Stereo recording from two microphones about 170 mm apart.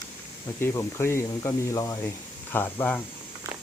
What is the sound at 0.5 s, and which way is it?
Speech, 15° left (ahead or behind).